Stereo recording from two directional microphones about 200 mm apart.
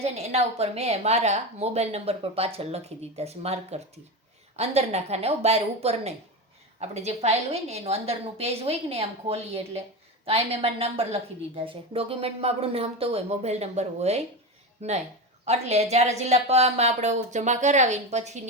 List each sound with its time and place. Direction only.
0.0 s a woman's voice: 30° right (ahead or behind)